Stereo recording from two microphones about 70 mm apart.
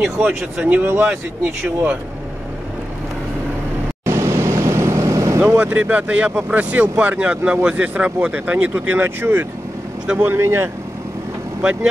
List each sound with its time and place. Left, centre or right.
0.7 s speech: right
4.0 s vehicle: right
5.6 s speech: right